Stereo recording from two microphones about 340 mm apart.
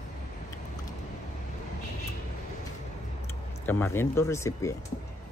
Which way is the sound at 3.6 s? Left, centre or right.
Centre.